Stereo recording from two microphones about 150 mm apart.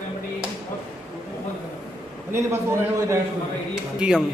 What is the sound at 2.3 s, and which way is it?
Speech, 20° right (ahead or behind).